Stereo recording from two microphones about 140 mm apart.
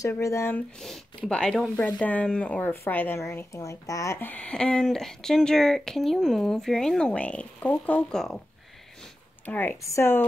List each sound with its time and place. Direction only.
0.0 s speech: 20° left (ahead or behind)
0.7 s speech: centre (ahead or behind)
9.5 s speech: 15° left (ahead or behind)